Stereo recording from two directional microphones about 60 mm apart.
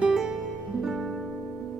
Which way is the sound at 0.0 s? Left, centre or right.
Centre.